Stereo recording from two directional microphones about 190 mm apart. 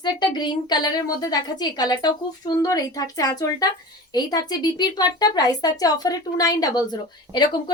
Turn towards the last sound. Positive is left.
turn(degrees=25)  # may be behind; listen again after turning